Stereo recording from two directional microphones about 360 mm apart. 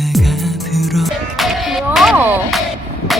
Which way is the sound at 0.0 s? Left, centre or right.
Centre.